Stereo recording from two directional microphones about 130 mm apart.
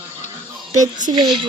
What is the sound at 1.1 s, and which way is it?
Speech, 35° right (ahead or behind).